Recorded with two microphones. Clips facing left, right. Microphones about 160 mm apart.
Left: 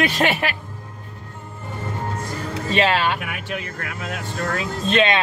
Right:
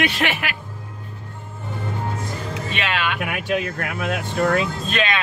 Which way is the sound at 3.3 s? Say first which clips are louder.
Right 6 dB; 70° right (ahead or behind).